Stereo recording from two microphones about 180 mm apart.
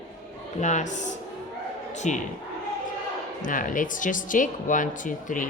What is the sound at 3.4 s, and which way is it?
Speech, 45° left (ahead or behind).